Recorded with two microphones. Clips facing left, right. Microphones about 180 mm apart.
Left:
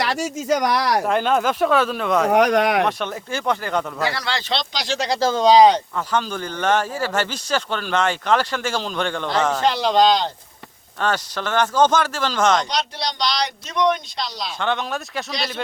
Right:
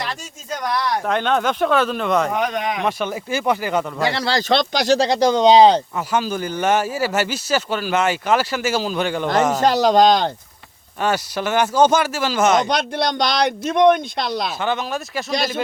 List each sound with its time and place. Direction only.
0.0 s speech: 80° left
1.0 s speech: 5° left (ahead or behind)
2.3 s speech: 75° left (ahead or behind)
2.8 s speech: 5° right (ahead or behind)
4.0 s speech: 25° right (ahead or behind)
4.4 s speech: 50° right (ahead or behind)
4.9 s speech: 25° right (ahead or behind)
6.1 s speech: 10° right (ahead or behind)
9.6 s speech: 45° right (ahead or behind)
11.0 s speech: 10° right (ahead or behind)
12.6 s speech: 55° right (ahead or behind)
14.6 s speech: 5° right (ahead or behind)